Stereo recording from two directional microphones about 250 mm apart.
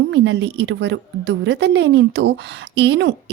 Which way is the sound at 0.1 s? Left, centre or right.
Right.